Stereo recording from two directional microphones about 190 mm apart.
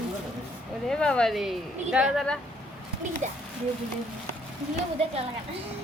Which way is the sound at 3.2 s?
40° right (ahead or behind).